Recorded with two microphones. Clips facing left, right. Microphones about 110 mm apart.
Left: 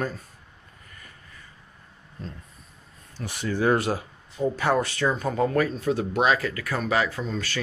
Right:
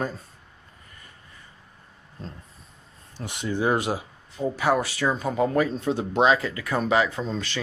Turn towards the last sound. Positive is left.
turn(degrees=-25)  # may be behind; listen again after turning